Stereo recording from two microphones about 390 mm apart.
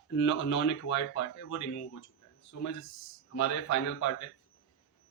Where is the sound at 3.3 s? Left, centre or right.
Left.